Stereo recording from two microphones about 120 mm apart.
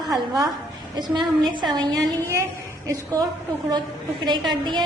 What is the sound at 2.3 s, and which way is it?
Speech, 25° right (ahead or behind).